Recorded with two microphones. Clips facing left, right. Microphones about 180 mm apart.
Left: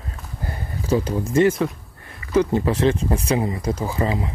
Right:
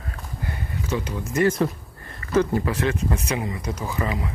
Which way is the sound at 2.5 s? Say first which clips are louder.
Left 4 dB; 25° left (ahead or behind).